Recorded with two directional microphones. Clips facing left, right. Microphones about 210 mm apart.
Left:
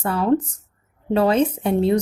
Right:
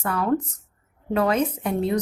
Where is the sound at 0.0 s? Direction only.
30° left (ahead or behind).